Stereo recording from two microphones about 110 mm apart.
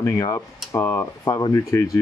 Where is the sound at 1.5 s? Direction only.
25° left (ahead or behind).